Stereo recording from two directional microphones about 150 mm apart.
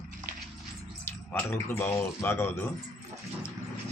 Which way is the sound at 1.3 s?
15° left (ahead or behind).